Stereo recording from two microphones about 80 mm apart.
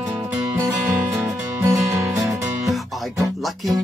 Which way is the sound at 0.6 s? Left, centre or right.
Right.